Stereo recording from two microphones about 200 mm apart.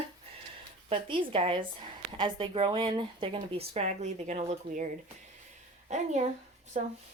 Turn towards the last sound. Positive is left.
turn(degrees=-35)  # may be behind; listen again after turning